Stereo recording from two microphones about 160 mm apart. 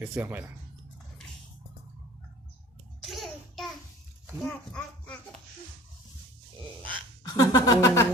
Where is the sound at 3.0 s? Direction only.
Centre (ahead or behind).